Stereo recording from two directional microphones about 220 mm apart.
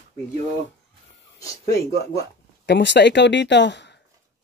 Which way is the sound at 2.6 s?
50° left (ahead or behind).